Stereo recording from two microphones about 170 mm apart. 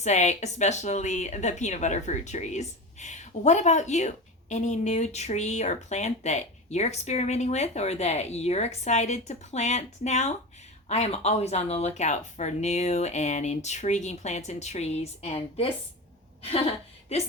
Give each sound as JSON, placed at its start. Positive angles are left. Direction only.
{"t": 0.0, "sound": "a woman's voice", "side_deg": 45}